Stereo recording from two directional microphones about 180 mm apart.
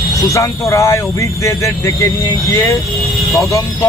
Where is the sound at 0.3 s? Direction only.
15° left (ahead or behind).